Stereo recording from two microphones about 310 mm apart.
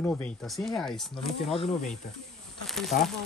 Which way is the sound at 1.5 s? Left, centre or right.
Left.